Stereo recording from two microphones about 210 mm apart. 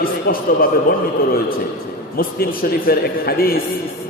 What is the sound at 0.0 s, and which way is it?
Speech, 45° left (ahead or behind).